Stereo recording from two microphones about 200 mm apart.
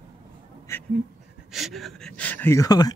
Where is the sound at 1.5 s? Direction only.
Centre (ahead or behind); by 2.9 s 20° left (ahead or behind).